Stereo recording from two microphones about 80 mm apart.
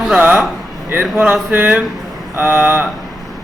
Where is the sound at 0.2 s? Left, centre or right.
Centre.